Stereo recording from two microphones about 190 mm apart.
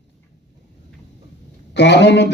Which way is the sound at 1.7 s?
65° left (ahead or behind).